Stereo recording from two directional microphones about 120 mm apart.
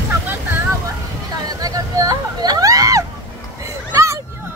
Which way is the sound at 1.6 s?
30° right (ahead or behind).